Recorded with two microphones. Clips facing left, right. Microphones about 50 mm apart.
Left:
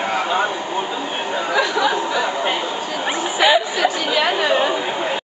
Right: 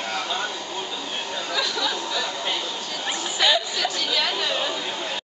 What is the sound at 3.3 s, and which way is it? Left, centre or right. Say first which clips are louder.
Chatter: left 7 dB; left.